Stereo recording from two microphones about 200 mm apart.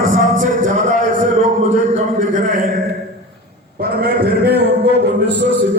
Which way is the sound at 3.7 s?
50° right (ahead or behind).